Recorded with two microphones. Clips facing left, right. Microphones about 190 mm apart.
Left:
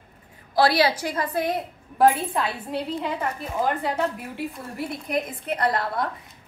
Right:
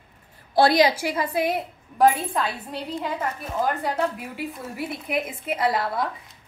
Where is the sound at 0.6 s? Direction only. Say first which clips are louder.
Right 2 dB; 20° right (ahead or behind).